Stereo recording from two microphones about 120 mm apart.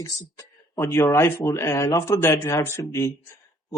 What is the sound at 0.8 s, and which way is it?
A man's voice, 20° left (ahead or behind).